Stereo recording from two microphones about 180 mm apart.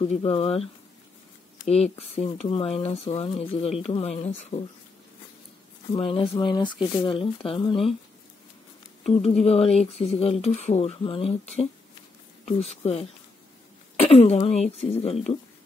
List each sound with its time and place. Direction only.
0.2 s speech: 35° left (ahead or behind)
1.7 s speech: 35° left (ahead or behind)
5.9 s speech: 35° left (ahead or behind)
9.0 s speech: 35° left (ahead or behind)
13.9 s speech: 35° left (ahead or behind)